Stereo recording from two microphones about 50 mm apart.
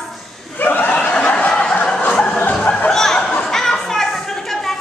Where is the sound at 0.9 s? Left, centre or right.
Left.